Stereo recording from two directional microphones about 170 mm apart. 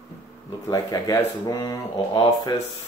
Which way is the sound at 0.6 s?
20° left (ahead or behind).